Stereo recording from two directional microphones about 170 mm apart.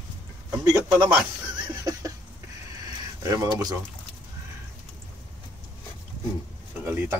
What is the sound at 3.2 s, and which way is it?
Speech, 20° right (ahead or behind).